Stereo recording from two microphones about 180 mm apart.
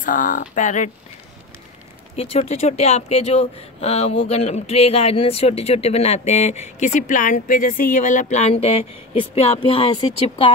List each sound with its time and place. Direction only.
0.0 s speech: 45° left (ahead or behind)
2.1 s speech: 35° left (ahead or behind)